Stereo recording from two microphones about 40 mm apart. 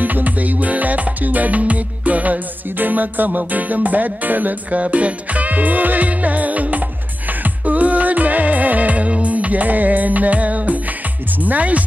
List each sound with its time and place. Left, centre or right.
0.0 s music: right
4.6 s music: right
11.3 s speech: right